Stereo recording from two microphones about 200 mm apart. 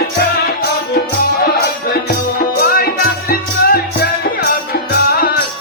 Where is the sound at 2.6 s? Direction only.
45° left (ahead or behind).